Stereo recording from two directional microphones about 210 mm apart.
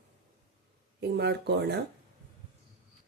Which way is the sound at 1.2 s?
55° right (ahead or behind).